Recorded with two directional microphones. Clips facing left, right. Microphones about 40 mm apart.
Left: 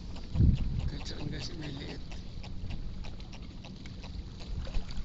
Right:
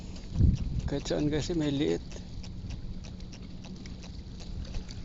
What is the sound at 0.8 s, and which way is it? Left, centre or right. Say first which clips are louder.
Speech: right 12 dB; right.